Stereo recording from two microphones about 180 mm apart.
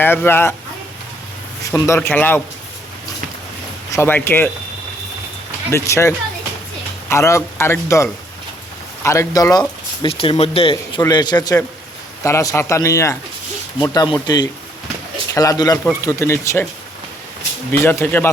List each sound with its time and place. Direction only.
0.0 s speech: 10° left (ahead or behind)
1.6 s speech: 15° left (ahead or behind)
3.9 s speech: 10° left (ahead or behind)
5.7 s speech: 15° left (ahead or behind)
17.7 s speech: 10° left (ahead or behind)